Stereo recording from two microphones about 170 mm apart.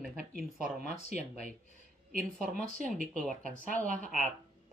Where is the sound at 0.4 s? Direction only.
60° right (ahead or behind).